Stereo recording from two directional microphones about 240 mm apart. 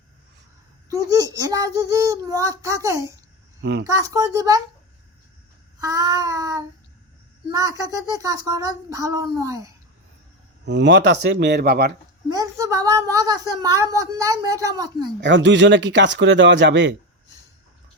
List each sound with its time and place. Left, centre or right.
0.9 s speech: centre
3.6 s speech: right
3.8 s speech: centre
5.8 s speech: centre
10.7 s speech: right
12.3 s speech: centre
15.2 s speech: right